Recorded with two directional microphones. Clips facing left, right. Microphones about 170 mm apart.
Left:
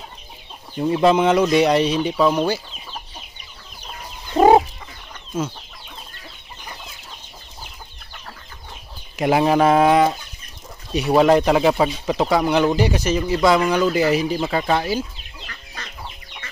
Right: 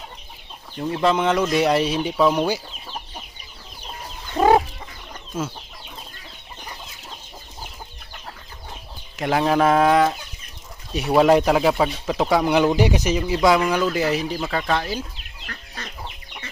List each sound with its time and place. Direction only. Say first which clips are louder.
0.7 s speech: left 4 dB; 10° left (ahead or behind); by 2.6 s 10° right (ahead or behind)
4.4 s chicken: left 4 dB; 25° left (ahead or behind)
9.2 s speech: left 3 dB; 10° left (ahead or behind)
11.1 s speech: left 1 dB; 5° right (ahead or behind)
12.4 s speech: even; 10° right (ahead or behind); by 15.0 s 5° left (ahead or behind)